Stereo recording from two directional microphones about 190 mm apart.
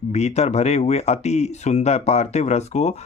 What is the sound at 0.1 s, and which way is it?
Speech, 35° left (ahead or behind).